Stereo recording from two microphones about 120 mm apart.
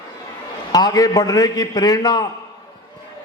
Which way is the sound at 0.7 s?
35° left (ahead or behind).